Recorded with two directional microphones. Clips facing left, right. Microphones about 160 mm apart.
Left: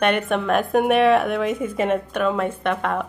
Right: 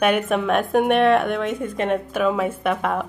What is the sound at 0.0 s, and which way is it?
A woman's voice, 5° right (ahead or behind).